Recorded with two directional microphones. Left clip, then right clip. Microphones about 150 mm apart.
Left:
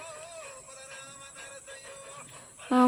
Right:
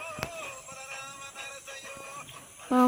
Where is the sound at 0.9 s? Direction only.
65° left (ahead or behind).